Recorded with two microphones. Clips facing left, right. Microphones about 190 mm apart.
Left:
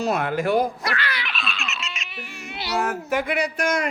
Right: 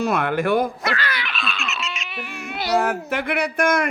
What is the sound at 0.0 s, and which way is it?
Speech, 55° right (ahead or behind).